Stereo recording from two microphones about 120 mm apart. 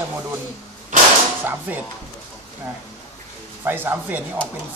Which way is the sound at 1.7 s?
15° right (ahead or behind).